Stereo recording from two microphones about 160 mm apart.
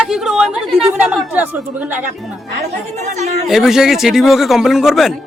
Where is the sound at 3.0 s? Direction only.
45° right (ahead or behind).